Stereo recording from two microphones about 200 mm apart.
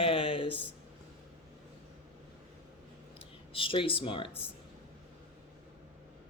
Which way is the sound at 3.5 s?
25° left (ahead or behind).